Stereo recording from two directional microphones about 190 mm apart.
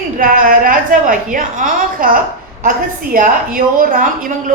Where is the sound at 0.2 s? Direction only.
45° right (ahead or behind).